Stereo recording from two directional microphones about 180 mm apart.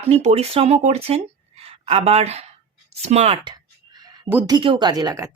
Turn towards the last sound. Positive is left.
turn(degrees=-20)  # may be behind; listen again after turning